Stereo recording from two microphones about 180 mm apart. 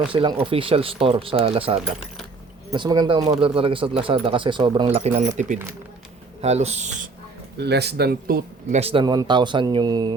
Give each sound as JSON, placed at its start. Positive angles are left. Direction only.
{"t": 0.1, "sound": "speech", "side_deg": -30}
{"t": 6.4, "sound": "speech", "side_deg": -35}
{"t": 7.6, "sound": "speech", "side_deg": -65}
{"t": 8.7, "sound": "speech", "side_deg": -35}